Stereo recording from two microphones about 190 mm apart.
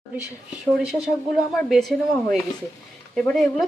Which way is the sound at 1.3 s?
Centre (ahead or behind).